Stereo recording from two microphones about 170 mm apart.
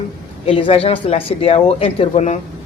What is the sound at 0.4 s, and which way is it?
Speech, 35° left (ahead or behind).